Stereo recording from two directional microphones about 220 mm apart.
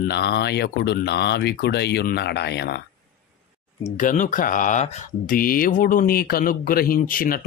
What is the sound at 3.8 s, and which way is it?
Speech, 35° left (ahead or behind).